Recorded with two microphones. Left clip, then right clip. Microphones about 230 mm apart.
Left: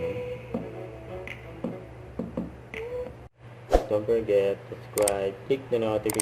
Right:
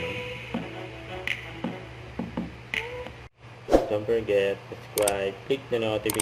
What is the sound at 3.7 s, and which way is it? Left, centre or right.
Speech, centre.